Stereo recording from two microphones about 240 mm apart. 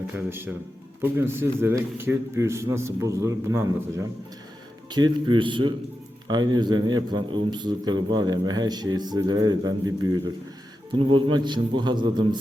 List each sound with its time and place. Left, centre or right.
0.1 s a man's voice: centre